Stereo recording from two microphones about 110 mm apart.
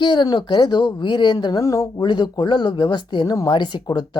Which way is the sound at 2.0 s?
45° left (ahead or behind).